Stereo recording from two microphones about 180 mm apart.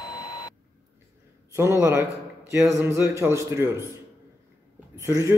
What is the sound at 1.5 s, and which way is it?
A man's voice, 15° right (ahead or behind).